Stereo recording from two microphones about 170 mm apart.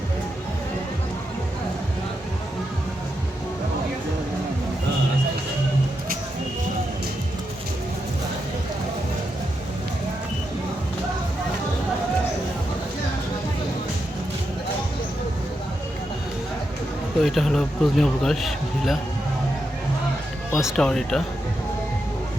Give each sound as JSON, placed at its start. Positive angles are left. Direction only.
{"t": 17.2, "sound": "speech", "side_deg": 0}
{"t": 20.6, "sound": "speech", "side_deg": 0}